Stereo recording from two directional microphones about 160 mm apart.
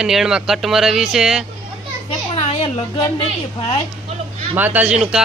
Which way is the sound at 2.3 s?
40° left (ahead or behind).